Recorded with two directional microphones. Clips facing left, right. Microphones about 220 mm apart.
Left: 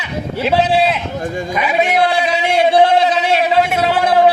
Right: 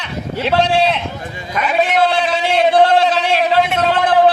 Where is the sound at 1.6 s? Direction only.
10° left (ahead or behind).